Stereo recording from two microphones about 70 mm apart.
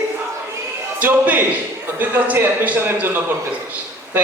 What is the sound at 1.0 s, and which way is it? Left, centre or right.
A man's voice, right.